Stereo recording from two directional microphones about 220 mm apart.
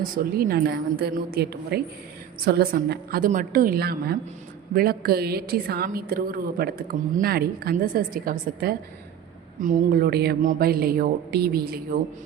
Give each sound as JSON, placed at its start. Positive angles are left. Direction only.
{"t": 0.0, "sound": "a woman's voice", "side_deg": -45}